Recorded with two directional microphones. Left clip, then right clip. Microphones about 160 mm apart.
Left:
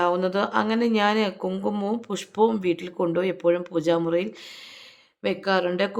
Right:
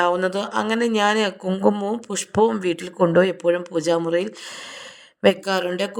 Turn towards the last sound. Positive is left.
turn(degrees=0)  # may be behind; listen again after turning